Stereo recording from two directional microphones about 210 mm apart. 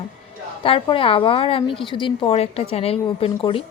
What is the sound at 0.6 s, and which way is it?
A woman's voice, 25° left (ahead or behind).